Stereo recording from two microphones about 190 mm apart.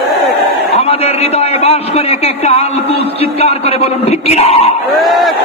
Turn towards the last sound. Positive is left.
turn(degrees=0)  # may be behind; listen again after turning